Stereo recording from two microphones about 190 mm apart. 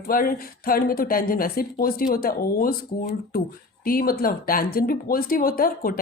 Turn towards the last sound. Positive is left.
turn(degrees=50)  # may be behind; listen again after turning